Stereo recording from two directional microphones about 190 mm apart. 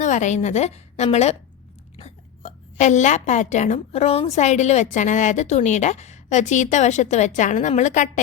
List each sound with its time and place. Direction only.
0.0 s a woman's voice: 40° left (ahead or behind)